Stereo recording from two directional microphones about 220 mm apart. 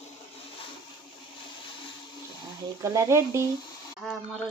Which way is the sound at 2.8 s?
15° right (ahead or behind).